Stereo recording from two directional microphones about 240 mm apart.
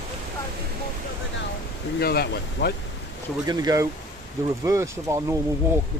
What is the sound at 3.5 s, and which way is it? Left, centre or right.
Speech, centre.